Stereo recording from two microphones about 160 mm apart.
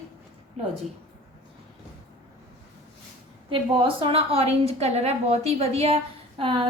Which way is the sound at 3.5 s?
35° right (ahead or behind).